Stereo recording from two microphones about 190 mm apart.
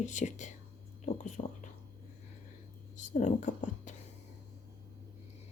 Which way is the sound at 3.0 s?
40° left (ahead or behind).